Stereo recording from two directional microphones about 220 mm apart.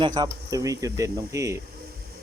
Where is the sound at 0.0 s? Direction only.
20° right (ahead or behind).